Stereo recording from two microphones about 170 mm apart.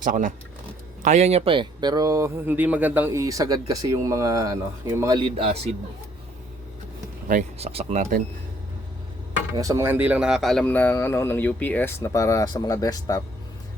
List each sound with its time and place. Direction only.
0.0 s speech: 50° right (ahead or behind)
1.0 s speech: 40° right (ahead or behind)
7.6 s speech: 35° right (ahead or behind)
9.6 s speech: 15° right (ahead or behind); by 13.2 s 20° left (ahead or behind)